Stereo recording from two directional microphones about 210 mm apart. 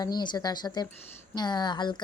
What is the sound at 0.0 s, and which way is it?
Speech, 20° left (ahead or behind).